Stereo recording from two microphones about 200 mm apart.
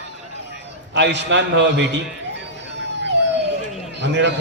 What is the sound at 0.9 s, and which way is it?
Speech, 60° right (ahead or behind).